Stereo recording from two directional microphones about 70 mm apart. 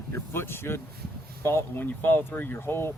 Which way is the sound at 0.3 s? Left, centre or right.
Left.